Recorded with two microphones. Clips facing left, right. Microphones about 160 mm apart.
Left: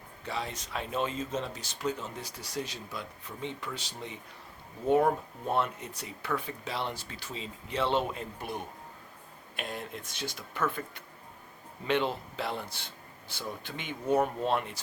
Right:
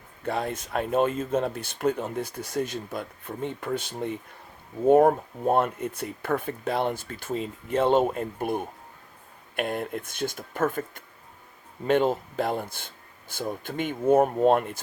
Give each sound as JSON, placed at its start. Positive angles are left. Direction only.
{"t": 0.3, "sound": "speech", "side_deg": -55}